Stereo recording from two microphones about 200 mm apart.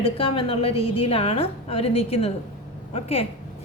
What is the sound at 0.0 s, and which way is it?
A woman's voice, 25° left (ahead or behind).